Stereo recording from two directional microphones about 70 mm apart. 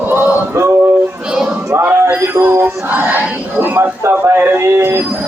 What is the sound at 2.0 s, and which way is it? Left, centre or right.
Speech, right.